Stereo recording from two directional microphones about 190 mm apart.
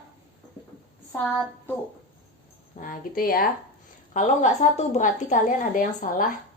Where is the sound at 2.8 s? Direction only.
45° left (ahead or behind).